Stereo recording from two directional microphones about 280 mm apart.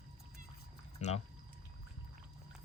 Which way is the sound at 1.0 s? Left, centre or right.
Left.